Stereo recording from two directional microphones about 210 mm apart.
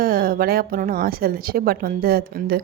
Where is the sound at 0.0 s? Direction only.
45° right (ahead or behind).